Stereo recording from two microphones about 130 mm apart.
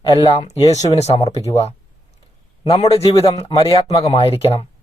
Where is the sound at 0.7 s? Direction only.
60° left (ahead or behind).